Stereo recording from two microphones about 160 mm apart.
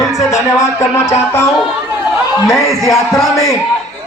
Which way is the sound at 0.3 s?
20° left (ahead or behind).